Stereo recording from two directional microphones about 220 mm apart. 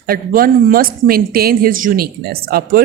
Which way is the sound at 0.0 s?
40° right (ahead or behind).